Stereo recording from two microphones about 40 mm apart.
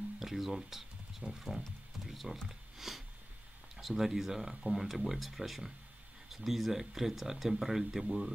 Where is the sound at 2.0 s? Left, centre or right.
Centre.